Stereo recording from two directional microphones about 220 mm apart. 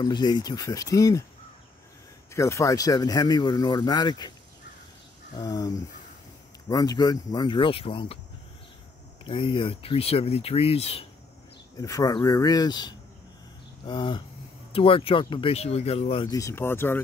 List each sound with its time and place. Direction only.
0.0 s speech: 20° left (ahead or behind)
2.3 s speech: 15° left (ahead or behind)
5.4 s speech: 15° left (ahead or behind)
6.7 s speech: 15° left (ahead or behind)
9.2 s speech: 25° left (ahead or behind)
11.8 s speech: 15° left (ahead or behind)